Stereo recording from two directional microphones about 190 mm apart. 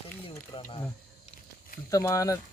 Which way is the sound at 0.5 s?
20° left (ahead or behind).